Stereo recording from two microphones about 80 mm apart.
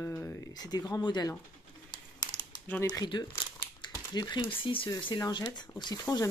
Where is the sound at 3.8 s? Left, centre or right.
Left.